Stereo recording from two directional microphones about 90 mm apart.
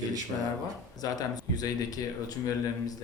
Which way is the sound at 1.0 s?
45° left (ahead or behind).